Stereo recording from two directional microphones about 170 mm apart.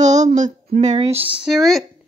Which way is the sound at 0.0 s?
45° right (ahead or behind).